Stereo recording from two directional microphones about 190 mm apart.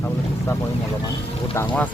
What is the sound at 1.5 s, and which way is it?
Music, 10° left (ahead or behind).